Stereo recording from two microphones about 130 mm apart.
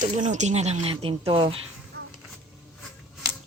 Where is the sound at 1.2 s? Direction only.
40° right (ahead or behind).